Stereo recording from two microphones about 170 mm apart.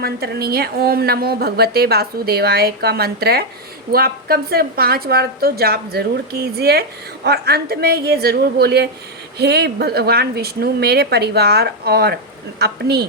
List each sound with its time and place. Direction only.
0.0 s a woman's voice: 65° right (ahead or behind)